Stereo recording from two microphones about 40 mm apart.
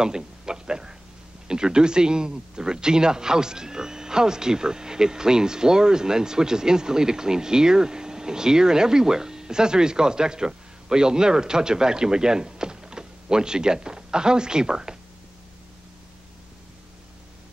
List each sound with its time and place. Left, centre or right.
0.0 s speech: centre